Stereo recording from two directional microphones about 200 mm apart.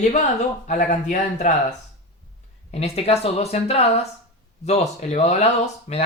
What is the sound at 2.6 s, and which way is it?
Speech, 30° left (ahead or behind).